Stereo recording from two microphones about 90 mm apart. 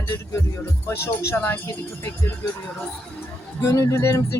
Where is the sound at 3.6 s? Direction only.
35° left (ahead or behind).